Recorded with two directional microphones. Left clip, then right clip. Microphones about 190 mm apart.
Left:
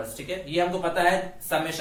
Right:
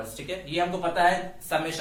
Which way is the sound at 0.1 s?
20° right (ahead or behind).